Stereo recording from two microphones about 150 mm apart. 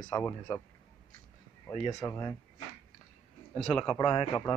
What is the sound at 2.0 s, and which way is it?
Speech, 25° left (ahead or behind).